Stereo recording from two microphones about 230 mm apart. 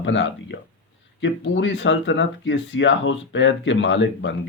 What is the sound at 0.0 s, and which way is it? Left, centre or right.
Speech, left.